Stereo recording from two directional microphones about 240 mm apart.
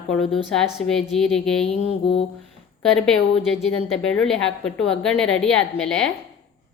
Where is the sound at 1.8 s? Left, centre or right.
Left.